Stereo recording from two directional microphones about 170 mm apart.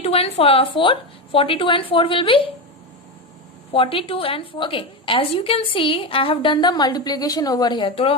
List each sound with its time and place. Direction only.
0.0 s a woman's voice: 35° left (ahead or behind)
3.7 s a woman's voice: 30° left (ahead or behind)